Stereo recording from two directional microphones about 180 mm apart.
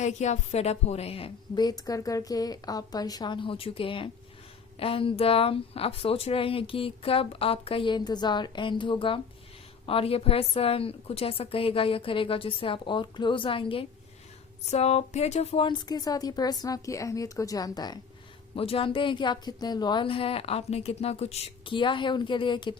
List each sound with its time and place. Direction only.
0.0 s a woman's voice: 40° left (ahead or behind)